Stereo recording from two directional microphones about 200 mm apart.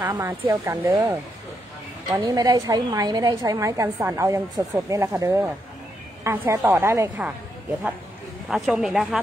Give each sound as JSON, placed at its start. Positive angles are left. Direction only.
{"t": 0.1, "sound": "a woman's voice", "side_deg": -20}
{"t": 8.5, "sound": "speech", "side_deg": 0}